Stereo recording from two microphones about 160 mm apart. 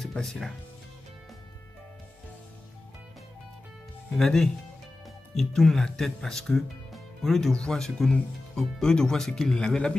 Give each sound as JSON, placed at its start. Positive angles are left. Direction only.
{"t": 0.0, "sound": "speech", "side_deg": 0}
{"t": 4.1, "sound": "speech", "side_deg": 0}